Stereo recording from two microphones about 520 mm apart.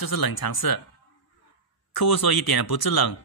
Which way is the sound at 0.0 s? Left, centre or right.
Left.